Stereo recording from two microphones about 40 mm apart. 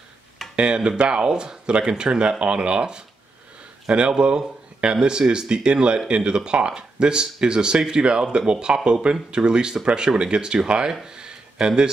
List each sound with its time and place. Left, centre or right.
0.6 s speech: right
4.1 s speech: right